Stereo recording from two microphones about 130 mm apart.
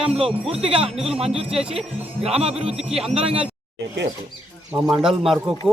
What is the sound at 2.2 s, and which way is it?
Speech, 50° right (ahead or behind).